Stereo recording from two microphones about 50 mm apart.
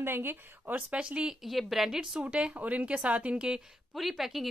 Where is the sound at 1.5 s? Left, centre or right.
Centre.